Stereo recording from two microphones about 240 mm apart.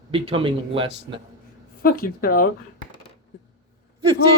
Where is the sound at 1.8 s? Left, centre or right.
Left.